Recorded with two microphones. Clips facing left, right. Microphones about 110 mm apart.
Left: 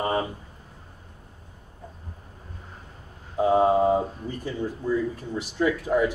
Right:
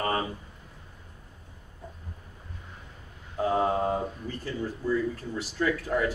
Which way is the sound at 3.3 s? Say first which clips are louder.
Left 6 dB; 20° left (ahead or behind).